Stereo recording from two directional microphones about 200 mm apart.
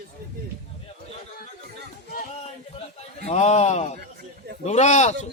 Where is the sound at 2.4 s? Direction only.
30° left (ahead or behind).